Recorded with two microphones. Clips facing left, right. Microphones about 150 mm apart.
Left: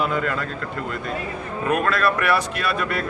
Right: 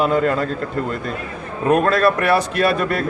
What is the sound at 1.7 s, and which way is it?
Speech, 35° right (ahead or behind).